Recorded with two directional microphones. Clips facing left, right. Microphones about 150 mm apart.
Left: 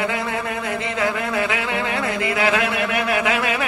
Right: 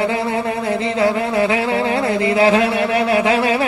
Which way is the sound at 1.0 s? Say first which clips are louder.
Right 6 dB; 30° right (ahead or behind).